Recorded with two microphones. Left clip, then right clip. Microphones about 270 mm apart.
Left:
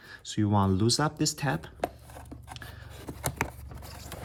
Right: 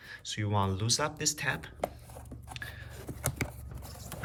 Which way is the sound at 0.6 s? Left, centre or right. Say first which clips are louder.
Left 4 dB; centre.